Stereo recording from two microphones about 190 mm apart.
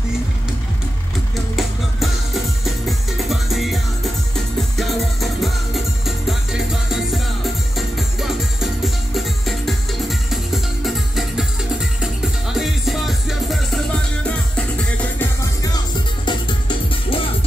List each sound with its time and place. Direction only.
1.6 s music: centre (ahead or behind)
12.5 s music: centre (ahead or behind)
15.1 s music: 20° left (ahead or behind)